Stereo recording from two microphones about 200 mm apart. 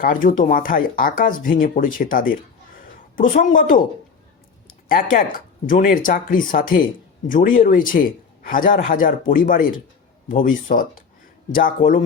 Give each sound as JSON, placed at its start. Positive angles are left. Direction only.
{"t": 0.0, "sound": "a man's voice", "side_deg": 45}
{"t": 5.1, "sound": "a man's voice", "side_deg": 45}